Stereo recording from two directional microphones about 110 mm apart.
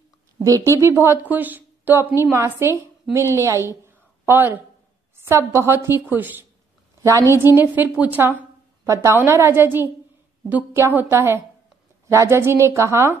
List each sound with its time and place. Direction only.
0.4 s a woman's voice: 30° right (ahead or behind)
7.0 s a woman's voice: 30° right (ahead or behind)
7.3 s a woman's voice: 20° right (ahead or behind)